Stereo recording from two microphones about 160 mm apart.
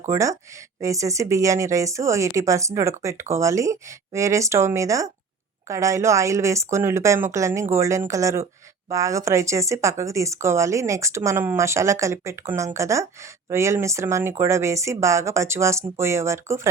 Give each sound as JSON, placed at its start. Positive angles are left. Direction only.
{"t": 0.1, "sound": "speech", "side_deg": -20}